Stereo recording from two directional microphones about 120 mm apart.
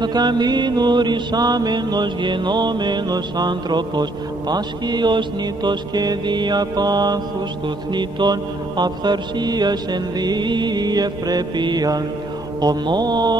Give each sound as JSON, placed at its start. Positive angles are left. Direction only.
{"t": 0.0, "sound": "mantra", "side_deg": -35}